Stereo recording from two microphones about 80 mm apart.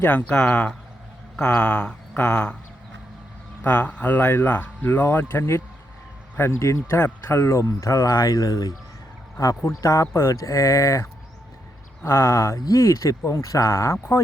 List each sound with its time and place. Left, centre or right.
0.0 s speech: left
3.6 s speech: centre; by 12.5 s left
12.5 s speech: left